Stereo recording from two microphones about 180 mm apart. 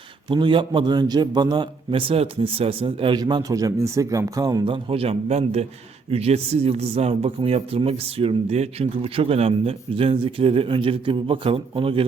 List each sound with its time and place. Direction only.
0.3 s a man's voice: 25° right (ahead or behind)